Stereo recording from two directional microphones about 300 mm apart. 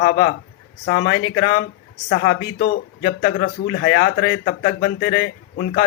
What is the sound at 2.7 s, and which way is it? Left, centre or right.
Speech, left.